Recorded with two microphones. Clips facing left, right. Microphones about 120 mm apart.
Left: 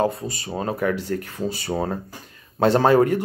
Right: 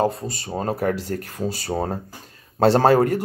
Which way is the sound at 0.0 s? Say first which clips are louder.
Even; 45° right (ahead or behind).